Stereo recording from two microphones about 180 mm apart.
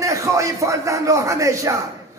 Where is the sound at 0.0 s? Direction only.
15° right (ahead or behind).